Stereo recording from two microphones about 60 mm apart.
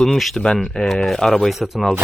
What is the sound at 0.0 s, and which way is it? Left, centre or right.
Speech, centre.